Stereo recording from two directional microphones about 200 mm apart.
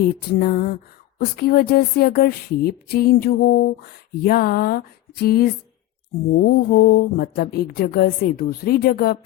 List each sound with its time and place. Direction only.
0.0 s speech: 50° left (ahead or behind)